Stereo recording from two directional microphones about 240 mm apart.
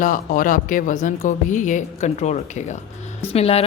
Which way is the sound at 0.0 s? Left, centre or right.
Left.